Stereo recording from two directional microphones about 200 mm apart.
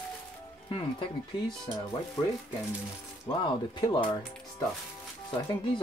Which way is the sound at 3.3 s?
25° left (ahead or behind).